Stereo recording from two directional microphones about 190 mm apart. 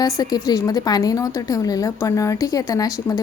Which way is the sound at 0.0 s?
20° left (ahead or behind).